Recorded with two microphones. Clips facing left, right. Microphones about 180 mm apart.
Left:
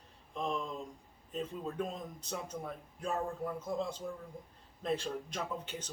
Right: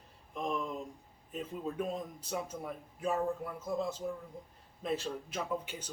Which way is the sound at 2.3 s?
5° right (ahead or behind).